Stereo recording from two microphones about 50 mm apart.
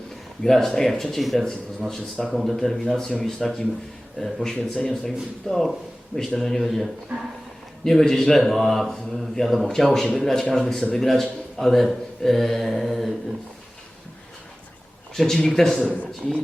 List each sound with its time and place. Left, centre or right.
0.4 s speech: centre
1.9 s speech: centre
2.2 s a man's voice: centre
15.1 s a man's voice: centre